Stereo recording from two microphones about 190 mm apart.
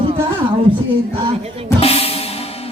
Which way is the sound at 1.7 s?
30° left (ahead or behind).